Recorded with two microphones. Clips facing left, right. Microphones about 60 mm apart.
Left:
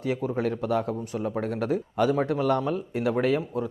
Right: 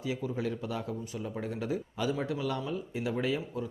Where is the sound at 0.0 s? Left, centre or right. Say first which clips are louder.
Left 7 dB; left.